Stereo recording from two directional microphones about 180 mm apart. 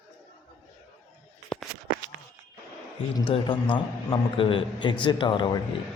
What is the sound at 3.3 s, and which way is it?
A man's voice, 25° left (ahead or behind).